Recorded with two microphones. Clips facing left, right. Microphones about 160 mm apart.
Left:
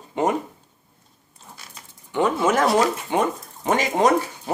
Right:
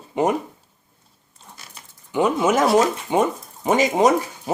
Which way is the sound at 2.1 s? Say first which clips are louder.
Right 1 dB; 10° right (ahead or behind).